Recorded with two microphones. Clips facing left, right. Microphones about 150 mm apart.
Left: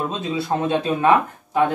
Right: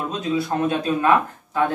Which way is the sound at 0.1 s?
25° left (ahead or behind).